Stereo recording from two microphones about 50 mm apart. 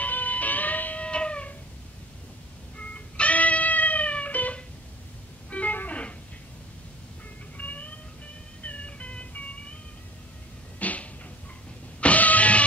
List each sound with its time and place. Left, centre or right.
0.0 s music: left
1.0 s music: left
2.9 s music: left
7.5 s cat: left
8.6 s music: left
10.8 s a sound: left
12.0 s music: left